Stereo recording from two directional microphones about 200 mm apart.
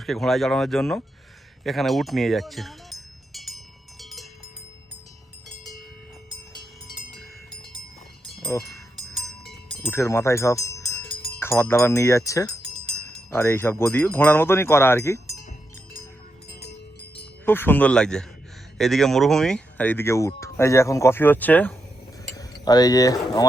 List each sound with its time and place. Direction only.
0.0 s speech: centre (ahead or behind)
1.6 s chink: centre (ahead or behind)
4.0 s a sound: centre (ahead or behind)
8.4 s speech: 15° left (ahead or behind)
9.1 s a sound: centre (ahead or behind)
9.9 s speech: 15° left (ahead or behind)
16.5 s a sound: 55° left (ahead or behind)
17.4 s speech: 10° left (ahead or behind)
22.6 s speech: 20° left (ahead or behind)